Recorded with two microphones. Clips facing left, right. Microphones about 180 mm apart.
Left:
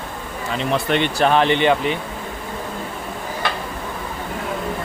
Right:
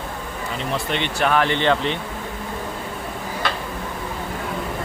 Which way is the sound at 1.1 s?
30° left (ahead or behind).